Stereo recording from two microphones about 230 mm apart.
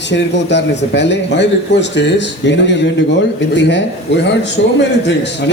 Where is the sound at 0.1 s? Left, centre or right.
Left.